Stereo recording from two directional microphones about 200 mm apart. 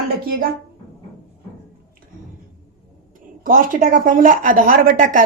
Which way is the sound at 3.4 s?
45° right (ahead or behind).